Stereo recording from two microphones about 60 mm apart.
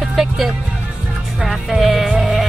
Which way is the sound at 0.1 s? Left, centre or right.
Centre.